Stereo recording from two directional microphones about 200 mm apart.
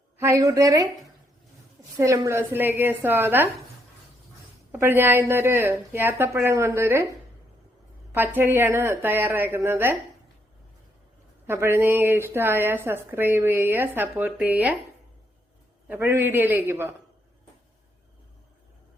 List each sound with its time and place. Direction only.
0.2 s speech: 15° right (ahead or behind)
2.0 s speech: 15° right (ahead or behind)
4.7 s speech: 10° right (ahead or behind)
8.1 s speech: 10° right (ahead or behind)
11.4 s speech: 10° right (ahead or behind)
15.9 s speech: 10° right (ahead or behind)